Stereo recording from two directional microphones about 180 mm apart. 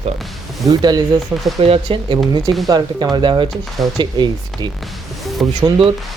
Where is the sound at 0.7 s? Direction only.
20° right (ahead or behind).